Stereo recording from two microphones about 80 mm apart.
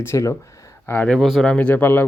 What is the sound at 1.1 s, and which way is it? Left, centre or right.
Speech, centre.